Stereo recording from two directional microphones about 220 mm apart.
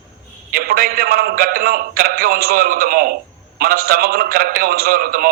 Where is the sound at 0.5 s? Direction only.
45° right (ahead or behind).